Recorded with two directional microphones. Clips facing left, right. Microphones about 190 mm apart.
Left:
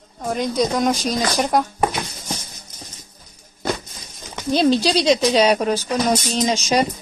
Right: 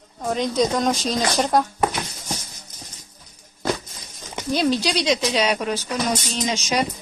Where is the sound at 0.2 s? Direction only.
Centre (ahead or behind).